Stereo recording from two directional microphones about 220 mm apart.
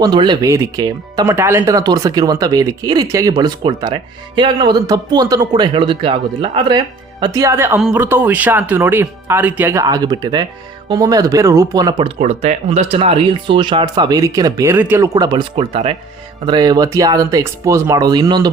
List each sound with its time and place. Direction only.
0.0 s speech: 20° right (ahead or behind)
12.2 s speech: 30° right (ahead or behind)